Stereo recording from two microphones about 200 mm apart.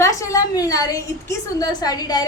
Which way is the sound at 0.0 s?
15° left (ahead or behind).